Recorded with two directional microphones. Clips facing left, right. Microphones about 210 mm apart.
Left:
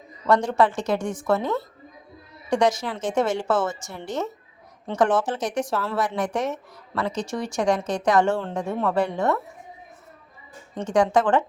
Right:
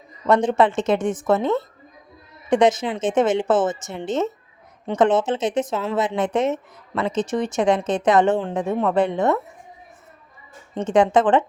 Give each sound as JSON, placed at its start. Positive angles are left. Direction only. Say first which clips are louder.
{"t": 0.3, "sound": "speech", "louder": "right 3 dB", "side_deg": -20}
{"t": 10.8, "sound": "speech", "louder": "right 3 dB", "side_deg": -20}